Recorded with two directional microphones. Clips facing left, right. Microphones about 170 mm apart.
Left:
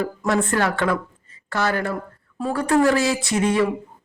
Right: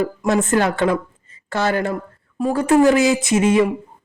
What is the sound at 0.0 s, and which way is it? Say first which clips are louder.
Speech: right 3 dB; 20° right (ahead or behind).